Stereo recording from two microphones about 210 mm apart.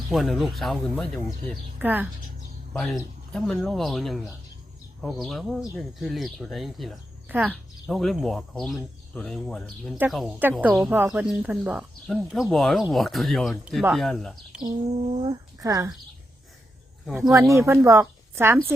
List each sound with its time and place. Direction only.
0.1 s speech: centre (ahead or behind)
1.8 s speech: 10° right (ahead or behind)
14.6 s speech: 25° right (ahead or behind)
17.1 s speech: centre (ahead or behind)
17.6 s a woman's voice: 15° right (ahead or behind)